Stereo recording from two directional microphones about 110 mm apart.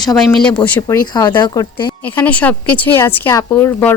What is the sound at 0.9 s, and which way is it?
Speech, 40° left (ahead or behind).